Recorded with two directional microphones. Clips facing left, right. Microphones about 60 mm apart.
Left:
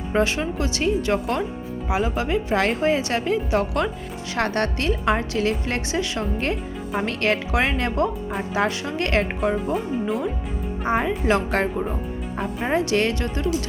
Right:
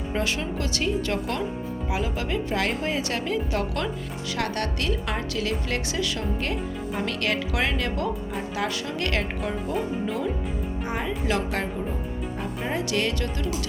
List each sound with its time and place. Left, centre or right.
0.1 s a woman's voice: left
10.8 s a woman's voice: left